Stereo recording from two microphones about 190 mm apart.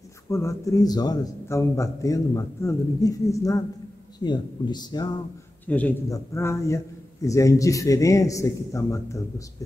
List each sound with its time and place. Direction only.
0.3 s a man's voice: 15° left (ahead or behind)
5.7 s a man's voice: 10° left (ahead or behind)